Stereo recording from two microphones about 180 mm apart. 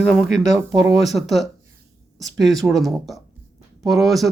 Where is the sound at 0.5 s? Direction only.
20° right (ahead or behind).